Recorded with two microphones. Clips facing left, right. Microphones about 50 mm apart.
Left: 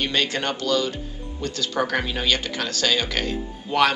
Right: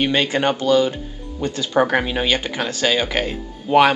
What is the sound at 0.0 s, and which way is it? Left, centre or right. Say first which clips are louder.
A man's voice: right 6 dB; centre.